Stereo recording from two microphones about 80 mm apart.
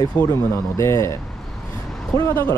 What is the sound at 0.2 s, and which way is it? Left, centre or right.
Speech, left.